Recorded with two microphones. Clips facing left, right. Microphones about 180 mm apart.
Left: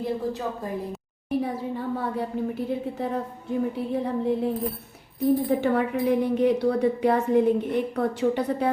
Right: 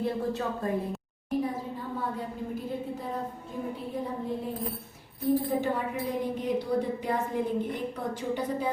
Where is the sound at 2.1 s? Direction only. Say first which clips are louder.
Left 7 dB; 70° left (ahead or behind).